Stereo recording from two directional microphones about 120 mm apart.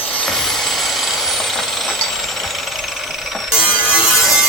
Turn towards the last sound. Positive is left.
turn(degrees=-5)  # may be behind; listen again after turning